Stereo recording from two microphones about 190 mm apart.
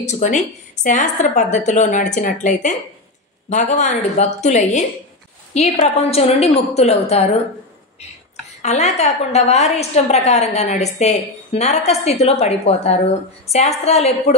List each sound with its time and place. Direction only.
0.0 s a woman's voice: 40° left (ahead or behind)
8.6 s a woman's voice: 35° left (ahead or behind)